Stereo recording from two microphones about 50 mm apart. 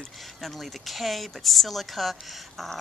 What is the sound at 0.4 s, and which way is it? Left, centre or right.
Speech, centre.